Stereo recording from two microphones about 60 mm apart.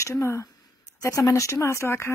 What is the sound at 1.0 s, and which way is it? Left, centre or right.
Speech, left.